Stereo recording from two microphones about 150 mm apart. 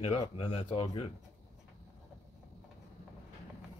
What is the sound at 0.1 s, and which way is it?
Speech, 40° left (ahead or behind).